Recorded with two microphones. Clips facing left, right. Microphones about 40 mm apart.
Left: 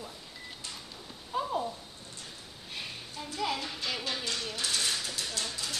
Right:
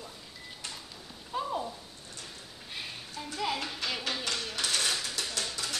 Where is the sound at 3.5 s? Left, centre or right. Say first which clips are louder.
Right 1 dB; right.